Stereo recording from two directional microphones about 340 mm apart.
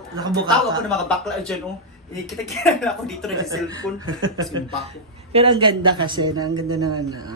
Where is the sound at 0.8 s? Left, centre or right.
Centre.